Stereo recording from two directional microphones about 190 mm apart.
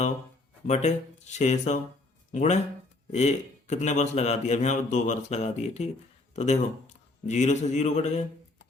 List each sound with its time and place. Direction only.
0.7 s a man's voice: 35° left (ahead or behind)